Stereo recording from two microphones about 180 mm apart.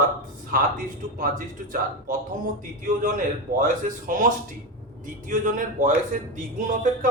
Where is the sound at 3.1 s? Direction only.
45° right (ahead or behind).